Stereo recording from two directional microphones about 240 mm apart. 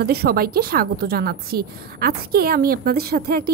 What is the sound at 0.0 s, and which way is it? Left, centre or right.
A woman's voice, right.